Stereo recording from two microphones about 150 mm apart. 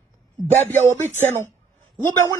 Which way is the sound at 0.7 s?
15° left (ahead or behind).